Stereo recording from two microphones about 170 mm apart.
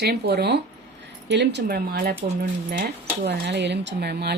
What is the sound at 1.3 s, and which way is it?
Speech, 90° right.